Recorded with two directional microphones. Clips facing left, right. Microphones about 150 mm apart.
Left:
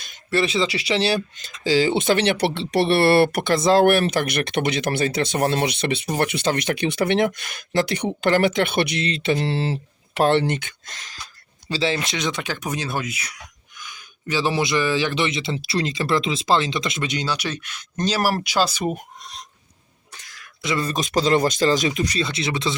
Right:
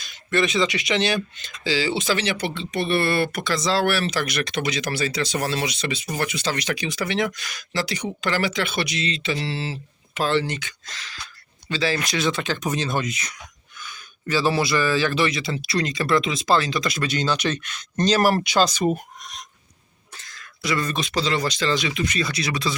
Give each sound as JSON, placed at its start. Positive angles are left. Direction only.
{"t": 0.3, "sound": "speech", "side_deg": 30}
{"t": 11.7, "sound": "speech", "side_deg": 25}
{"t": 19.2, "sound": "a sound", "side_deg": 30}
{"t": 20.2, "sound": "a sound", "side_deg": 10}
{"t": 20.6, "sound": "speech", "side_deg": 25}
{"t": 20.9, "sound": "speech", "side_deg": 45}
{"t": 22.2, "sound": "speech", "side_deg": 25}